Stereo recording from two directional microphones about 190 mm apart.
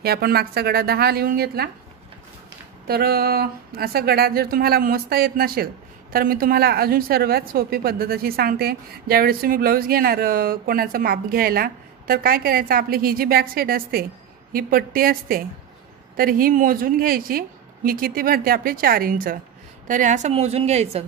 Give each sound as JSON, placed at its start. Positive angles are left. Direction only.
{"t": 0.0, "sound": "a woman's voice", "side_deg": -55}
{"t": 2.9, "sound": "a woman's voice", "side_deg": -55}